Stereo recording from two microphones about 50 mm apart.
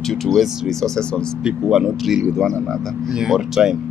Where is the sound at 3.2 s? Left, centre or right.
Centre.